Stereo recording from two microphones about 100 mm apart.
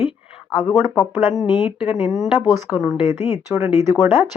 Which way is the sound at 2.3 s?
20° right (ahead or behind).